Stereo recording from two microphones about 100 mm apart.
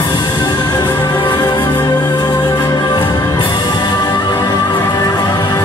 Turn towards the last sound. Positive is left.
turn(degrees=45)  # may be behind; listen again after turning